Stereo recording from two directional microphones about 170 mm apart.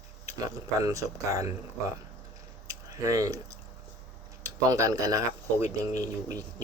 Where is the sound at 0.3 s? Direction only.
20° right (ahead or behind).